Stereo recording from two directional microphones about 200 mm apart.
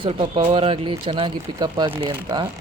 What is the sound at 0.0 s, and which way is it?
Speech, 25° right (ahead or behind).